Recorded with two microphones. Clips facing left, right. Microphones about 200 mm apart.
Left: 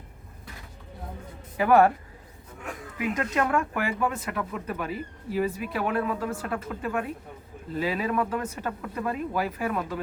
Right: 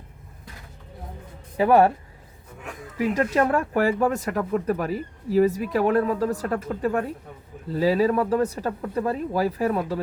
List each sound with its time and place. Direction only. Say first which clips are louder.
1.5 s speech: right 2 dB; 30° right (ahead or behind)
3.0 s speech: right 5 dB; 35° right (ahead or behind)